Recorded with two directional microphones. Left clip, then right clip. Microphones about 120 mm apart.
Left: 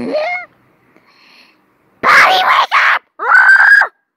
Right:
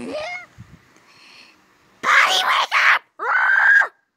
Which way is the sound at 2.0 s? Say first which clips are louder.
Left 8 dB; 25° left (ahead or behind).